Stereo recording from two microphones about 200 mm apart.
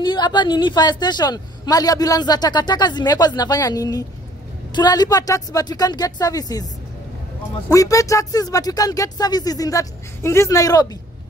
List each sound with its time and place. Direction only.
0.0 s speech: 20° left (ahead or behind)
7.7 s speech: 15° left (ahead or behind)